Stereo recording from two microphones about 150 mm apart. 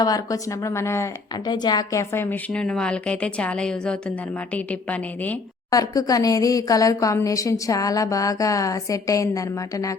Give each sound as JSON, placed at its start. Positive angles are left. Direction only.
{"t": 0.0, "sound": "a woman's voice", "side_deg": 25}
{"t": 5.7, "sound": "a woman's voice", "side_deg": 25}